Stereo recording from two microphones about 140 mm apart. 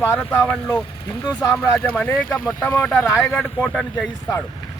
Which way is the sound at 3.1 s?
20° left (ahead or behind).